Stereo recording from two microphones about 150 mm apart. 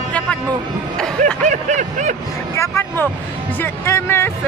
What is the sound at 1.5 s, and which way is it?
Snicker, 55° right (ahead or behind).